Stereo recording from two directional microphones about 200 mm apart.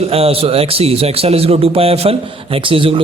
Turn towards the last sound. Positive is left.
turn(degrees=-25)  # may be behind; listen again after turning